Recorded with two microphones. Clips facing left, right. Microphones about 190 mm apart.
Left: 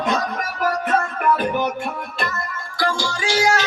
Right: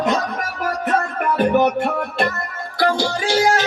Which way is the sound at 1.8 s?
65° right (ahead or behind).